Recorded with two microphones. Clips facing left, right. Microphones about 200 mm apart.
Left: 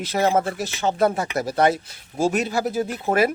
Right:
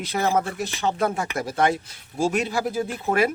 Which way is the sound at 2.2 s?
40° left (ahead or behind).